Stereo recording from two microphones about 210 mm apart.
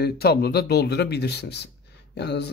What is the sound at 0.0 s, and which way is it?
Speech, 50° left (ahead or behind).